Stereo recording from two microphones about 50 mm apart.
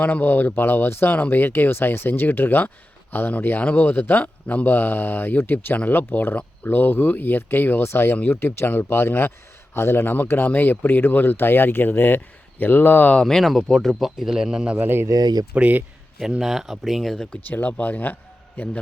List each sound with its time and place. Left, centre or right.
0.0 s speech: left
1.1 s speech: left
4.2 s speech: left
4.7 s speech: left
13.2 s speech: centre
14.8 s speech: right
15.5 s speech: right
16.4 s speech: centre
17.4 s a man's voice: left